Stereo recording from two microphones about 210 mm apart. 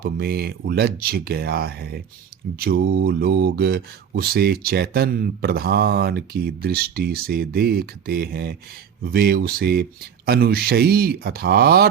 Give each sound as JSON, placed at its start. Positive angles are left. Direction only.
{"t": 0.0, "sound": "speech", "side_deg": -50}